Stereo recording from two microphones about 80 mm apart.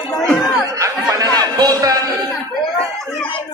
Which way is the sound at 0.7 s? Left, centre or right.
Right.